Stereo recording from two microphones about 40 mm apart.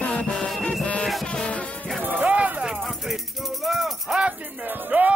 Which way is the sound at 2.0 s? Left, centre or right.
Right.